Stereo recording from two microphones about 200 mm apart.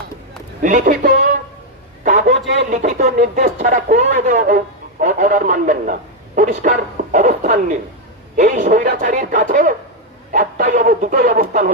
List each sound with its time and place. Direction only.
0.6 s a man's voice: 40° right (ahead or behind)
2.6 s speech: 40° right (ahead or behind)